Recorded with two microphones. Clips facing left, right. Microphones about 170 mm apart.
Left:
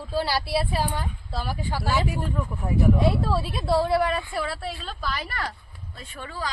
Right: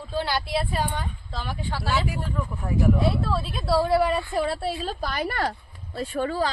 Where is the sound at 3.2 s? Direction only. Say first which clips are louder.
Left 1 dB; 15° left (ahead or behind).